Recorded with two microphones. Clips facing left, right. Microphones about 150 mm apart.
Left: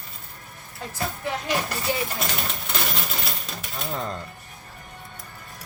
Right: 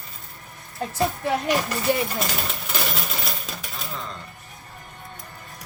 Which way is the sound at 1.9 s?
55° right (ahead or behind).